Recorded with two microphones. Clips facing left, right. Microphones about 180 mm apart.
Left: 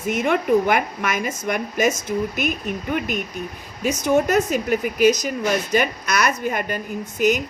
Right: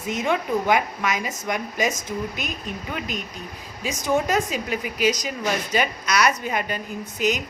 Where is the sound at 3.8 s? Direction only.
55° left (ahead or behind).